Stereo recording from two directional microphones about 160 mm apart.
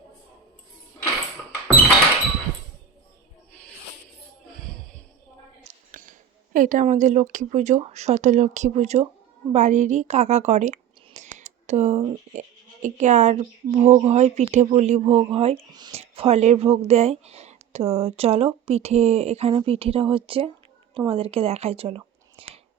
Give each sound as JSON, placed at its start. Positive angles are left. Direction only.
{"t": 5.9, "sound": "a woman's voice", "side_deg": -55}